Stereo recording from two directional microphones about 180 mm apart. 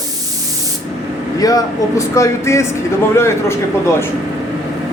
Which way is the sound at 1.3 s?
20° left (ahead or behind).